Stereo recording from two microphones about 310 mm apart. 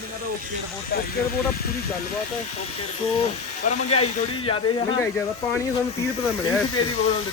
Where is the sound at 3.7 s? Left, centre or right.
Centre.